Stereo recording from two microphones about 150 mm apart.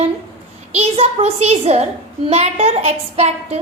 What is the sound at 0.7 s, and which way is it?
A child's voice, 45° right (ahead or behind).